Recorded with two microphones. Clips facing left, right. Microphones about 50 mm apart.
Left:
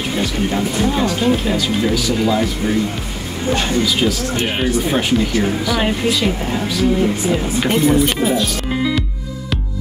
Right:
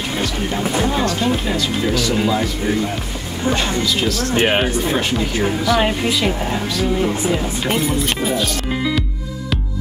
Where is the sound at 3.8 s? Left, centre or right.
Centre.